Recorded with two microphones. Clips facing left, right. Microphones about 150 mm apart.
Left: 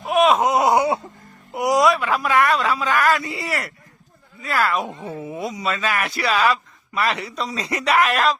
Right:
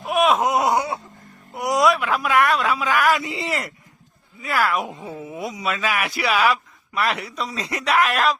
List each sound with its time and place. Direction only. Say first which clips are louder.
0.0 s wail: left 2 dB; centre (ahead or behind)
1.5 s a man's voice: left 2 dB; centre (ahead or behind)
3.1 s speech: even; 20° right (ahead or behind)
4.4 s speech: even; centre (ahead or behind)